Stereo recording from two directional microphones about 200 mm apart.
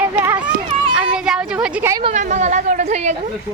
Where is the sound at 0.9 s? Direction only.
5° right (ahead or behind).